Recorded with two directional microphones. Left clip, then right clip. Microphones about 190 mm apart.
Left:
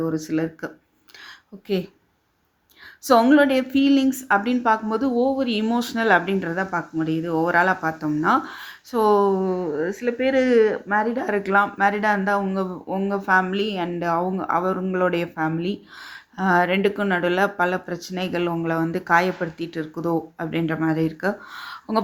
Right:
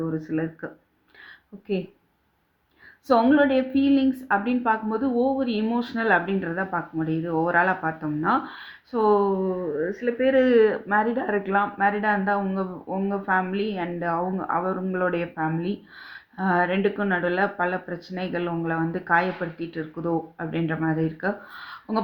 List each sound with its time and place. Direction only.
0.0 s a woman's voice: 30° left (ahead or behind)
3.1 s a woman's voice: 30° left (ahead or behind)
10.2 s a woman's voice: 15° left (ahead or behind); by 22.0 s 30° left (ahead or behind)